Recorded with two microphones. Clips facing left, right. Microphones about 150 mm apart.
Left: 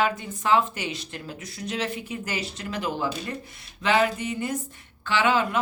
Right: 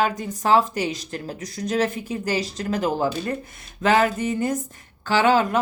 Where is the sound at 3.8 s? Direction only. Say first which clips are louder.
Right 4 dB; 45° right (ahead or behind).